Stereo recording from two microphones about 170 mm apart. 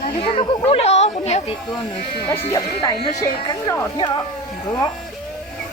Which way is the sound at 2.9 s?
35° left (ahead or behind).